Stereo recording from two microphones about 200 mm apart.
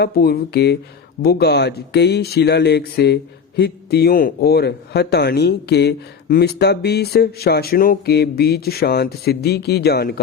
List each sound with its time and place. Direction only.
0.0 s speech: 50° left (ahead or behind)